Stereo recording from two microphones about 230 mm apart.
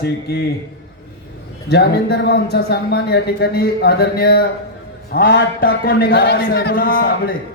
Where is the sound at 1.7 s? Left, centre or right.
Left.